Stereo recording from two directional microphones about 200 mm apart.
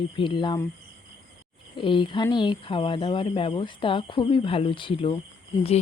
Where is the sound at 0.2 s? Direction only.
25° left (ahead or behind).